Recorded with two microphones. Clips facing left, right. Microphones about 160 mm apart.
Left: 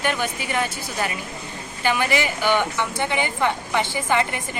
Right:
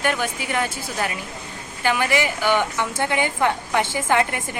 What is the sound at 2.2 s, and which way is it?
A woman's voice, 15° right (ahead or behind).